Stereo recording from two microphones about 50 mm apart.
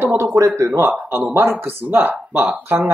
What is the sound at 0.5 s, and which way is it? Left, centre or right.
Speech, right.